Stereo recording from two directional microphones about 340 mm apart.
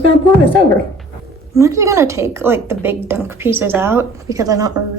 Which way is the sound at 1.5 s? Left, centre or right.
Centre.